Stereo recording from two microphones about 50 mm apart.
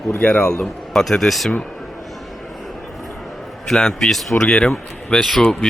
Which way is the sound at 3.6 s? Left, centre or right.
Centre.